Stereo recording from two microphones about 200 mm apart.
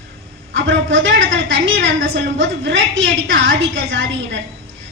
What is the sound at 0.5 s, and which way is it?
A woman's voice, 65° right (ahead or behind).